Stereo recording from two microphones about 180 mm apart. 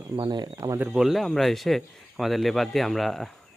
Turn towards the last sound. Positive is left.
turn(degrees=0)  # may be behind; listen again after turning